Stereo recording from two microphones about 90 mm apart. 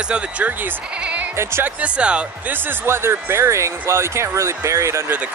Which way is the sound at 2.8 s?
30° right (ahead or behind).